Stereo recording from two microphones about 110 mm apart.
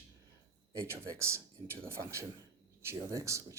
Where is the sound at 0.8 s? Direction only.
25° right (ahead or behind).